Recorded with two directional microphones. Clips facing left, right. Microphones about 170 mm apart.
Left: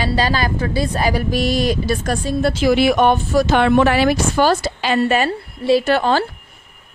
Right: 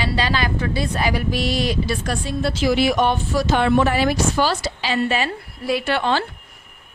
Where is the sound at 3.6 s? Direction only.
70° left (ahead or behind).